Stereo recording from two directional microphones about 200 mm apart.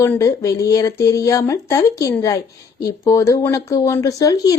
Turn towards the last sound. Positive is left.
turn(degrees=15)  # may be behind; listen again after turning